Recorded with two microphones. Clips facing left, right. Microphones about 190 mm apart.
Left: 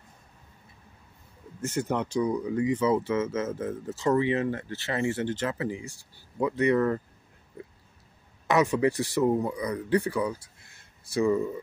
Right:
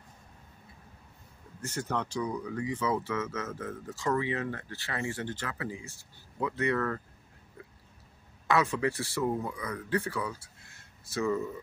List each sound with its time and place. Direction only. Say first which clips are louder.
1.6 s speech: left 5 dB; 20° left (ahead or behind)
8.5 s speech: left 5 dB; 15° left (ahead or behind)